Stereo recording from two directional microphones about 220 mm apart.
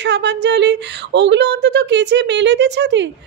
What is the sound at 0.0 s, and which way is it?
A woman's voice, 50° right (ahead or behind).